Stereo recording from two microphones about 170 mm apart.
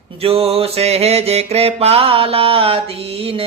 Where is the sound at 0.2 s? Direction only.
35° right (ahead or behind).